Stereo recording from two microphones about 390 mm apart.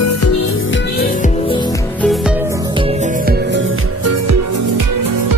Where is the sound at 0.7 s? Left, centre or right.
Left.